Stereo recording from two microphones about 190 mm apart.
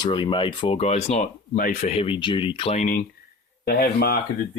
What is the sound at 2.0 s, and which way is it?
Speech, 25° left (ahead or behind).